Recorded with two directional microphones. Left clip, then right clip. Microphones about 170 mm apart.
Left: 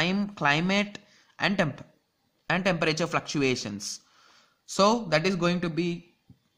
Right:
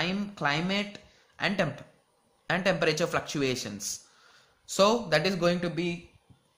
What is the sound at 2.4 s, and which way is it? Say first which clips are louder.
Speech: even; 25° left (ahead or behind).